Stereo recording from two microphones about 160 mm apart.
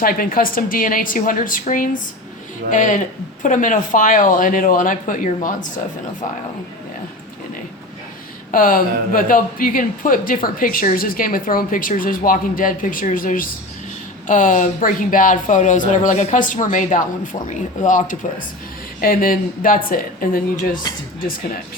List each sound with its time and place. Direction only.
0.0 s speech: 65° left (ahead or behind)
8.5 s speech: 60° left (ahead or behind)
20.9 s speech: 25° left (ahead or behind)